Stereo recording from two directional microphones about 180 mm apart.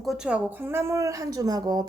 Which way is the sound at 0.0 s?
Centre (ahead or behind).